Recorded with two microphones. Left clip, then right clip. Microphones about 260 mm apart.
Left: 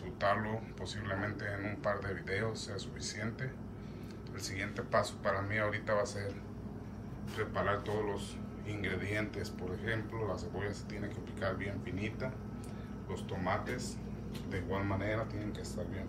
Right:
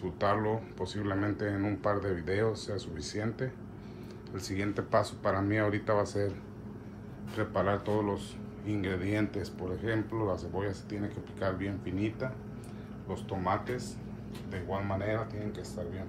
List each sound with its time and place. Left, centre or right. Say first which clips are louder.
0.2 s speech: right 3 dB; centre
7.3 s speech: right 4 dB; centre